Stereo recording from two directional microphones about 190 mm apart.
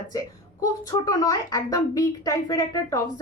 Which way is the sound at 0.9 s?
15° left (ahead or behind).